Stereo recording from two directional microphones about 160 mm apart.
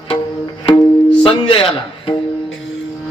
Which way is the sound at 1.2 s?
35° left (ahead or behind).